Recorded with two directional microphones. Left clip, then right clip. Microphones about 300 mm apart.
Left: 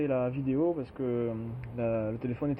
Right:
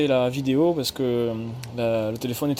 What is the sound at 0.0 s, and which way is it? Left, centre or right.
Speech, right.